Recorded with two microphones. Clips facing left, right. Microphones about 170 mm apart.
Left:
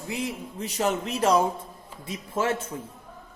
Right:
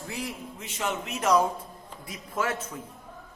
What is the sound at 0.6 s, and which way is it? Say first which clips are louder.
A man's voice: left 6 dB; 35° left (ahead or behind).